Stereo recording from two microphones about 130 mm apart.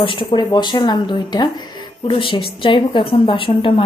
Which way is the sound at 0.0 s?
40° left (ahead or behind).